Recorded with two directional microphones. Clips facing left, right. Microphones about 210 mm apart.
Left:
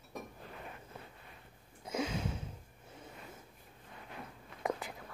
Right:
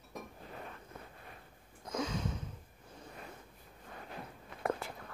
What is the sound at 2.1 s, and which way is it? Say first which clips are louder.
Sniff: even; 25° left (ahead or behind).